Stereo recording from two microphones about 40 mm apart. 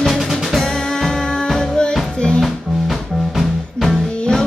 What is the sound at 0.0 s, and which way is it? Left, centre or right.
Music, centre.